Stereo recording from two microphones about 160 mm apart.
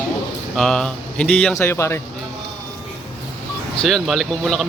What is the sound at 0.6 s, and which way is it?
Speech, 5° left (ahead or behind).